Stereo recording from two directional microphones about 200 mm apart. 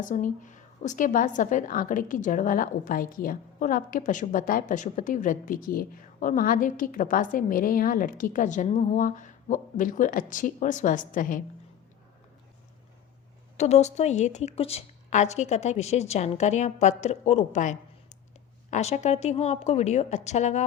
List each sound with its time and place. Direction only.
0.0 s a woman's voice: 40° left (ahead or behind)
13.6 s a woman's voice: 35° left (ahead or behind)